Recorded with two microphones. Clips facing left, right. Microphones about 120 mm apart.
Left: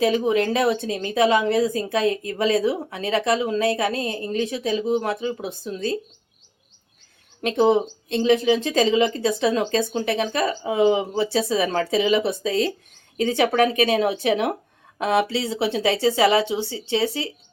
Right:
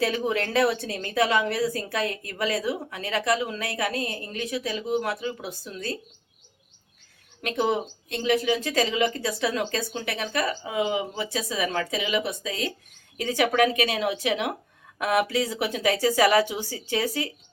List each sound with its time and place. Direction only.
0.0 s a woman's voice: 20° left (ahead or behind)
7.4 s a woman's voice: 25° left (ahead or behind)